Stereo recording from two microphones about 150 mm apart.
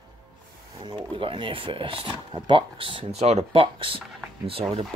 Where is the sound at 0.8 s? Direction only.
35° right (ahead or behind).